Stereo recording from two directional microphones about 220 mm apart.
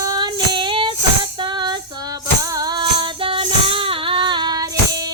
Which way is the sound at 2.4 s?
15° right (ahead or behind).